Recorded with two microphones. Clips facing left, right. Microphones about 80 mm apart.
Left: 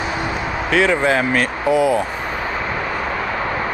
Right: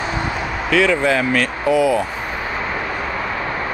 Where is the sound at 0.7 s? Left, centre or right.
Left.